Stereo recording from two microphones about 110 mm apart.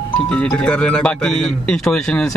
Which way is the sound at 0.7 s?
10° left (ahead or behind).